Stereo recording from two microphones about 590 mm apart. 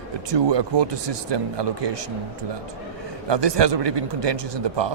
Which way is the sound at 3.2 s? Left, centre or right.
Right.